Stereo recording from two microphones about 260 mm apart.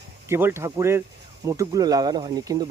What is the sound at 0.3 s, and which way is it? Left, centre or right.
Speech, centre.